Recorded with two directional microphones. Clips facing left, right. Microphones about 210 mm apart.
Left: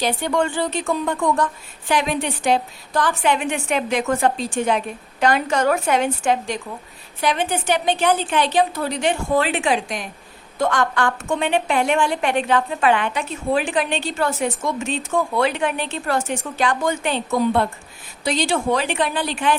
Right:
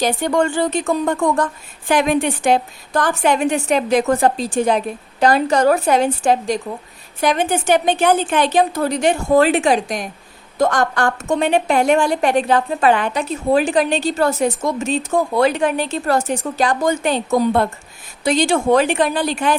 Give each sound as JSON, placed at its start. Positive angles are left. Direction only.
{"t": 0.0, "sound": "a woman's voice", "side_deg": -45}